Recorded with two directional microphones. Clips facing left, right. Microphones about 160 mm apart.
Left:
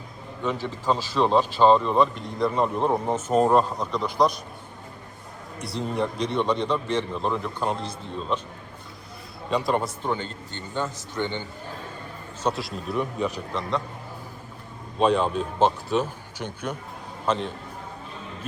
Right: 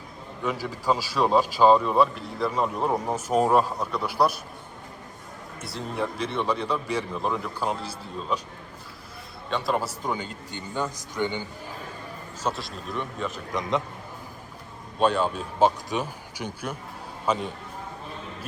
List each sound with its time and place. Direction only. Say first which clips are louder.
0.4 s speech: left 1 dB; 10° right (ahead or behind)
5.5 s a man's voice: left 3 dB; centre (ahead or behind)
9.5 s a man's voice: left 2 dB; centre (ahead or behind)
12.5 s a man's voice: left 3 dB; centre (ahead or behind)
13.5 s speech: right 1 dB; 20° right (ahead or behind)
14.9 s a man's voice: left 2 dB; centre (ahead or behind)